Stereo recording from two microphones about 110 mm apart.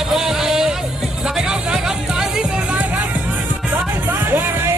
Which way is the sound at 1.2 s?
5° right (ahead or behind).